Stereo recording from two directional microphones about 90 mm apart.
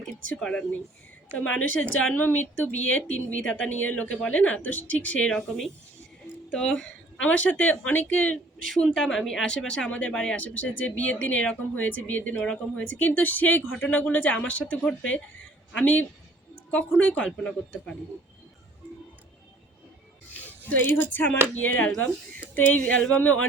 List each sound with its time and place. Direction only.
0.3 s speech: 10° left (ahead or behind)
6.5 s speech: 10° left (ahead or behind)
13.7 s speech: 5° left (ahead or behind)
20.3 s a sound: 20° left (ahead or behind)
21.6 s speech: 15° left (ahead or behind)